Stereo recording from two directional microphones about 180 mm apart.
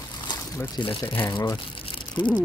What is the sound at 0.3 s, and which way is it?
Speech, 25° left (ahead or behind).